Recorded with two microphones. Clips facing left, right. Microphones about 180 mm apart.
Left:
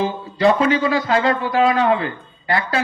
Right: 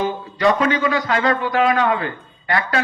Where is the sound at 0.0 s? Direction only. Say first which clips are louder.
Left 1 dB; 25° left (ahead or behind).